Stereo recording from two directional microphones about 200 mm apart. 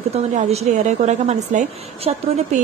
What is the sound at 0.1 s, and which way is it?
A woman's voice, 30° right (ahead or behind).